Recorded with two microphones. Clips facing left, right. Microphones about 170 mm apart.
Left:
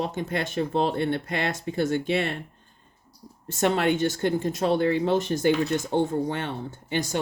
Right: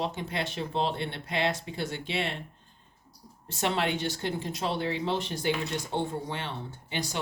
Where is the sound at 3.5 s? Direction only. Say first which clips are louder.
Left 6 dB; 50° left (ahead or behind).